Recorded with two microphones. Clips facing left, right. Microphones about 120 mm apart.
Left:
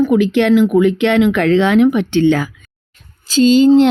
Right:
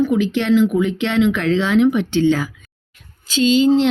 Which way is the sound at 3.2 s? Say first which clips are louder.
Left 5 dB; 40° left (ahead or behind).